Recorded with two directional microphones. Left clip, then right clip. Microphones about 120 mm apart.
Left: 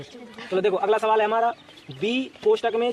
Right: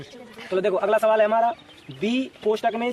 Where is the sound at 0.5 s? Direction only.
50° right (ahead or behind).